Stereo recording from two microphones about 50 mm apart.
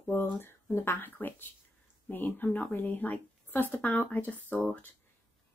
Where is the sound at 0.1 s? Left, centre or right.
Left.